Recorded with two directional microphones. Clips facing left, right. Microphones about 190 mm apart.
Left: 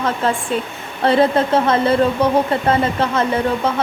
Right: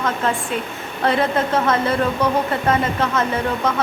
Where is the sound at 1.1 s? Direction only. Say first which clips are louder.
Left 5 dB; 30° left (ahead or behind).